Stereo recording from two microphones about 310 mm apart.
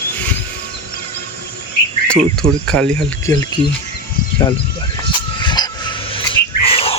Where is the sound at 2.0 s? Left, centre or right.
Centre.